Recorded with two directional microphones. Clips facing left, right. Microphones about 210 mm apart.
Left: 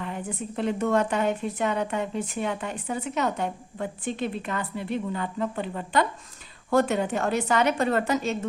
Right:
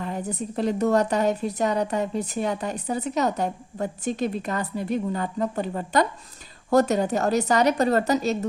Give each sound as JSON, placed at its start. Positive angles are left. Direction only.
{"t": 0.0, "sound": "a woman's voice", "side_deg": -40}